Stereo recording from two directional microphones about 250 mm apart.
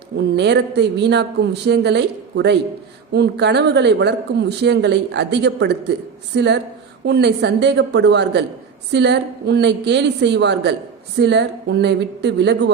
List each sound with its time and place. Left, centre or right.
0.2 s a man's voice: right